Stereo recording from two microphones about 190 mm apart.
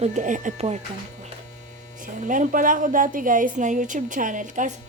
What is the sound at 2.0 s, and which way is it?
Speech, 45° right (ahead or behind).